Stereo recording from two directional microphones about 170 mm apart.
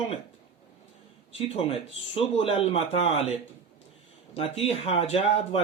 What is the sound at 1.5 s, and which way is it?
Speech, 35° left (ahead or behind).